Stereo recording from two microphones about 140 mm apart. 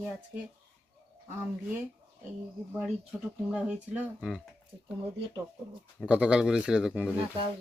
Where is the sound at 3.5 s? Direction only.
10° right (ahead or behind).